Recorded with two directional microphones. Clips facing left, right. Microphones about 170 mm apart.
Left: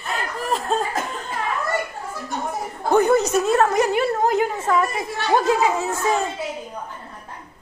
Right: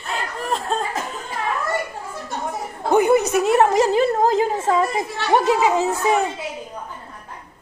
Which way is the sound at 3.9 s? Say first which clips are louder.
Right 3 dB; 35° right (ahead or behind).